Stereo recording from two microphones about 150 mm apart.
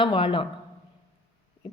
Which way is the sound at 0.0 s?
35° left (ahead or behind).